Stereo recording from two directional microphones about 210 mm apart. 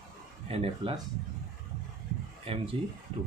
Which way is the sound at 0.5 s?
25° right (ahead or behind).